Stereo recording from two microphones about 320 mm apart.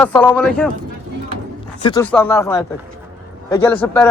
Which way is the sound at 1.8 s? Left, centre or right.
Centre.